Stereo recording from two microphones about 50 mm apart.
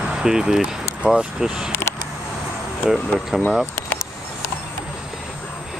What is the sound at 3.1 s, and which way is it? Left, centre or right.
Speech, centre.